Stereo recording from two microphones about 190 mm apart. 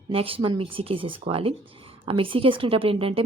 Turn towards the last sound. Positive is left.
turn(degrees=-30)  # may be behind; listen again after turning